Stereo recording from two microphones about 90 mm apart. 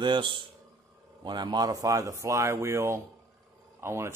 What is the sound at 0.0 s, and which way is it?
A man's voice, 60° right (ahead or behind).